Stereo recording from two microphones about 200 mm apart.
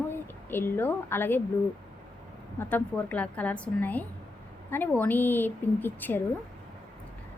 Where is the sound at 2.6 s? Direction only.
10° left (ahead or behind).